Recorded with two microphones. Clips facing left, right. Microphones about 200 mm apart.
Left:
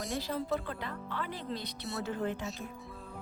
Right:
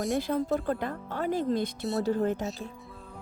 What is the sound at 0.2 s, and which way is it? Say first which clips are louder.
Speech: right 6 dB; 50° right (ahead or behind).